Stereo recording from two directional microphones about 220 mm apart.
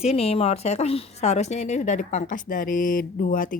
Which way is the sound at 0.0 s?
30° left (ahead or behind).